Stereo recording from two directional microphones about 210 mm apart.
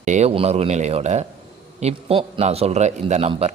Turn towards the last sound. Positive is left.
turn(degrees=-30)  # may be behind; listen again after turning